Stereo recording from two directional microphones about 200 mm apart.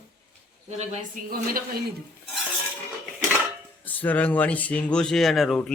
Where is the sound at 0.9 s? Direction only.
45° right (ahead or behind).